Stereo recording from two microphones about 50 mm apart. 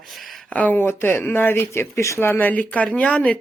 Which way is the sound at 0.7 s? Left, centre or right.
Left.